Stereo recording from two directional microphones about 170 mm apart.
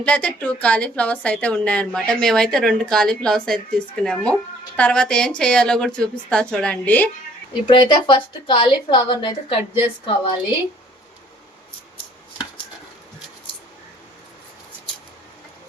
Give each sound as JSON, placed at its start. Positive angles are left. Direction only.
{"t": 0.0, "sound": "a woman's voice", "side_deg": 5}
{"t": 7.7, "sound": "a woman's voice", "side_deg": 30}